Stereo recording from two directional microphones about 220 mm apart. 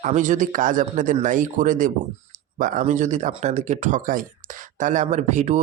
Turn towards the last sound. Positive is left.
turn(degrees=-30)  # may be behind; listen again after turning